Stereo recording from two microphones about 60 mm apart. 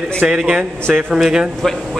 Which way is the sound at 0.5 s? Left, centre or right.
Centre.